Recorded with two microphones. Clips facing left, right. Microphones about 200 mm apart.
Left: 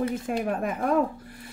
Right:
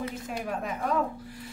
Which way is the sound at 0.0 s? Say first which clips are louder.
Left 7 dB; 55° left (ahead or behind).